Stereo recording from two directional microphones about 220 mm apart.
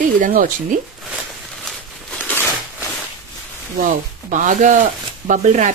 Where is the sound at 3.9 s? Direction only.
35° right (ahead or behind).